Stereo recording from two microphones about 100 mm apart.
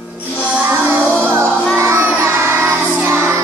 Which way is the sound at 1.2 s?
25° right (ahead or behind).